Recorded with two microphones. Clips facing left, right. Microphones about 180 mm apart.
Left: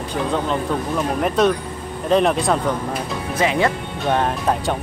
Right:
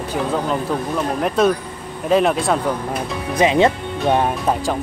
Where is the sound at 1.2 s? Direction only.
Centre (ahead or behind).